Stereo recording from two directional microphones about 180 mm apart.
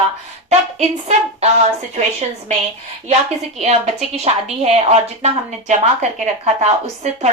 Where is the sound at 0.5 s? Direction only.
35° right (ahead or behind).